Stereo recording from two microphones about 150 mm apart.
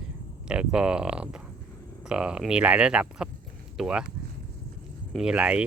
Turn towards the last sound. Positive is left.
turn(degrees=-10)  # may be behind; listen again after turning